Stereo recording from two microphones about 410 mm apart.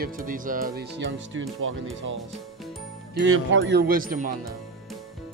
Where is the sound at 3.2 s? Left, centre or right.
Right.